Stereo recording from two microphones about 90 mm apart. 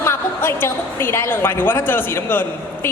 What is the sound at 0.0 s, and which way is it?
A woman's voice, 25° left (ahead or behind).